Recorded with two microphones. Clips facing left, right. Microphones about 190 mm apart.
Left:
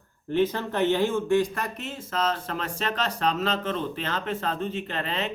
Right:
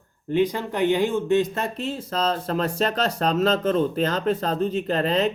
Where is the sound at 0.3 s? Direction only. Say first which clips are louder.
Right 2 dB; 15° right (ahead or behind).